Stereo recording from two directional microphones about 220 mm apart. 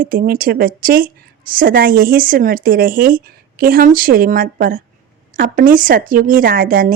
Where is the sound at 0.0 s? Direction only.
40° right (ahead or behind).